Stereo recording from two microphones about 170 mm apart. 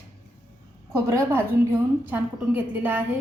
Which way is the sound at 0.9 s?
15° right (ahead or behind).